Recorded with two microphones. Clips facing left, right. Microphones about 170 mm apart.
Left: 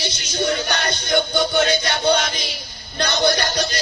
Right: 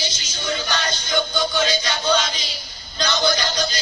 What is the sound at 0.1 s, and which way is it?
Music, 65° left (ahead or behind).